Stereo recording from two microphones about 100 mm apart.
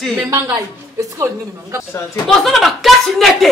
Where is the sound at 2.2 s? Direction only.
Centre (ahead or behind).